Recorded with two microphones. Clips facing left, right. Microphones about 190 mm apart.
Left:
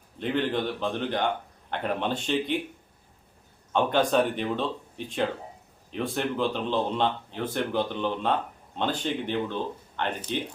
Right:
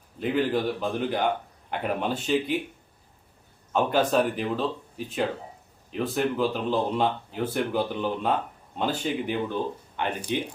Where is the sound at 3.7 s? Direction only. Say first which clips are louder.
Even; 5° right (ahead or behind).